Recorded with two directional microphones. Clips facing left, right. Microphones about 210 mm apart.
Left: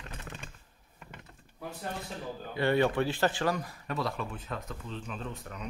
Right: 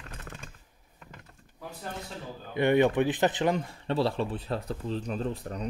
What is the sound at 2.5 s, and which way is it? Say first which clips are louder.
Speech: right 4 dB; 20° right (ahead or behind).